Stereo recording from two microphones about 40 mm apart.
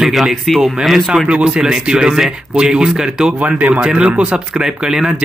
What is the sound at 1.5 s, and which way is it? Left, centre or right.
A man's voice, centre.